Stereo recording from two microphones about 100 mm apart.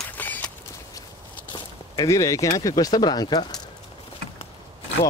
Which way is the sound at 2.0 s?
35° left (ahead or behind).